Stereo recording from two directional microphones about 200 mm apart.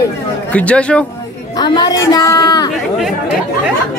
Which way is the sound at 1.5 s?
20° left (ahead or behind).